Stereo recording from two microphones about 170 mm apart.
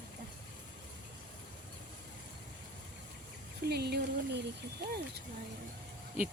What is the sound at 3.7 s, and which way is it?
Speech, 75° right (ahead or behind).